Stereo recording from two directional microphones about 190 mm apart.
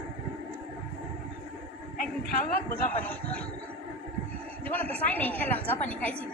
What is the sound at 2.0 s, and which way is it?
Speech, 45° left (ahead or behind).